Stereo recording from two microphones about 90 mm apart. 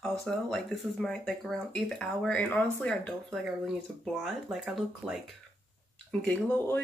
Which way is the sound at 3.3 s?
5° right (ahead or behind).